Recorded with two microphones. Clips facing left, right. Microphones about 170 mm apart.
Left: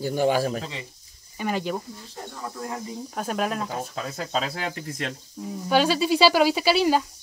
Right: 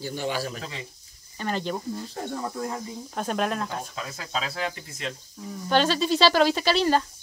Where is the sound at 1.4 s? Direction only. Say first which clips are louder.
Left 2 dB; 10° left (ahead or behind).